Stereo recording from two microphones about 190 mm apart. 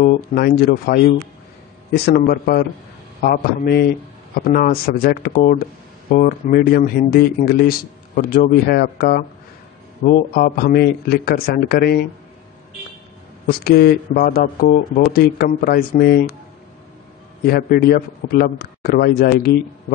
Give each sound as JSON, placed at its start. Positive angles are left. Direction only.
{"t": 0.0, "sound": "a man's voice", "side_deg": 50}
{"t": 13.5, "sound": "a man's voice", "side_deg": 55}
{"t": 17.5, "sound": "a man's voice", "side_deg": 50}